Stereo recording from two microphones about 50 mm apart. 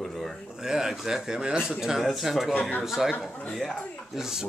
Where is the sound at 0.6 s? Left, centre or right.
Centre.